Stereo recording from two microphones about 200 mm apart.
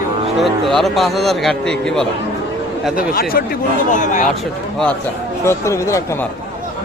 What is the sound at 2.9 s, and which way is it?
Speech, 45° left (ahead or behind).